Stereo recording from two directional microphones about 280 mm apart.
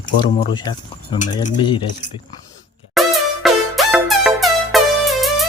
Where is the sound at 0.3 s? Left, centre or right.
Centre.